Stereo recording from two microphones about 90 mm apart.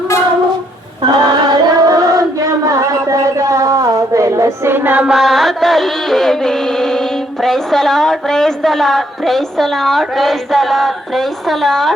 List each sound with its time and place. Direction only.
1.0 s female singing: 50° right (ahead or behind); by 5.0 s 20° right (ahead or behind)
5.0 s music: 5° right (ahead or behind)